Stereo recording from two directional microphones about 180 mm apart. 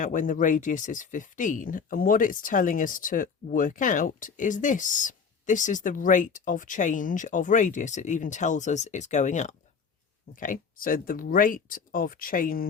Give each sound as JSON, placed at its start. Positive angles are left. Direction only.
{"t": 0.0, "sound": "speech", "side_deg": 45}